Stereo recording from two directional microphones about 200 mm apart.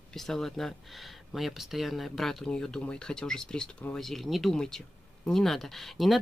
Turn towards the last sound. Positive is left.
turn(degrees=0)  # may be behind; listen again after turning